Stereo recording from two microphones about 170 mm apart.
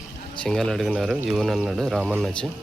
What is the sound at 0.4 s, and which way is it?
Speech, 5° left (ahead or behind).